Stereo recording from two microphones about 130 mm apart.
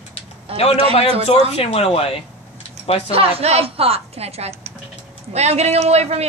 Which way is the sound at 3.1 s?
50° right (ahead or behind).